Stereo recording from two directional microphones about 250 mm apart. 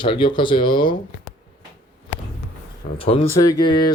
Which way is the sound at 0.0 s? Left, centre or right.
Centre.